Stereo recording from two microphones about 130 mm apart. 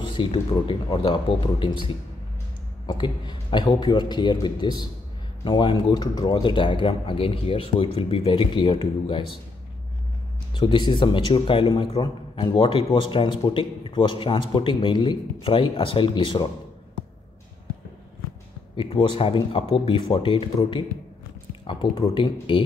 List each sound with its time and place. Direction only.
0.1 s speech: 40° left (ahead or behind)
2.9 s speech: 35° left (ahead or behind)
10.5 s speech: 35° left (ahead or behind)
18.8 s speech: 40° left (ahead or behind)
22.1 s speech: 40° left (ahead or behind)